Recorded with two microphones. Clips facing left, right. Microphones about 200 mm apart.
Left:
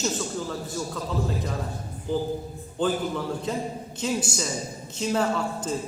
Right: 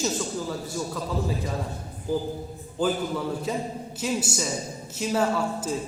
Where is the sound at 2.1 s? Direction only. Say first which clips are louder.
Even; 5° right (ahead or behind).